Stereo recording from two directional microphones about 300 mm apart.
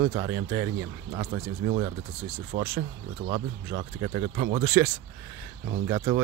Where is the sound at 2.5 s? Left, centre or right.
Right.